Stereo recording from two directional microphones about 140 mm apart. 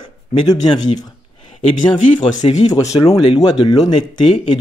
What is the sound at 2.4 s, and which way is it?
Speech, 50° left (ahead or behind).